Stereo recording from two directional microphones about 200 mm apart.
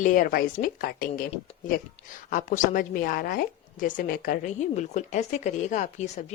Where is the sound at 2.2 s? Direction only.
40° left (ahead or behind).